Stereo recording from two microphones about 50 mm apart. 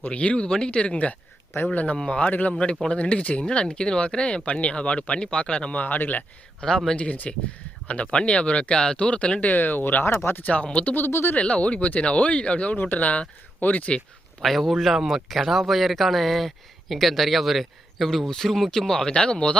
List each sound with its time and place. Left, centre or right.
0.0 s speech: left
3.4 s speech: centre
5.8 s speech: left
6.6 s speech: centre
6.9 s speech: left
9.5 s speech: left
10.4 s speech: left
10.8 s speech: left
11.1 s speech: left
11.3 s speech: left
14.4 s speech: centre